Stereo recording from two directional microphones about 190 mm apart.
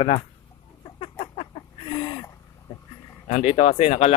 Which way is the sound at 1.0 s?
35° left (ahead or behind).